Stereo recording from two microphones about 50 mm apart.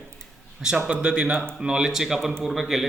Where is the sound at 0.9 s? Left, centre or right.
Right; by 2.8 s centre.